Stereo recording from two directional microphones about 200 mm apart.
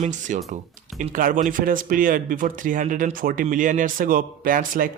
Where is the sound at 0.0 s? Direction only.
40° right (ahead or behind).